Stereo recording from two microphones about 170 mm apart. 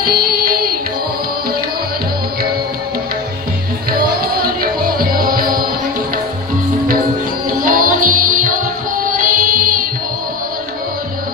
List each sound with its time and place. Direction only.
0.0 s music: 60° right (ahead or behind)
3.9 s music: 60° right (ahead or behind)
7.4 s music: 55° right (ahead or behind)